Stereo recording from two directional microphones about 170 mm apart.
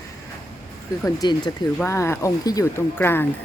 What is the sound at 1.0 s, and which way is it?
A woman's voice, 25° left (ahead or behind).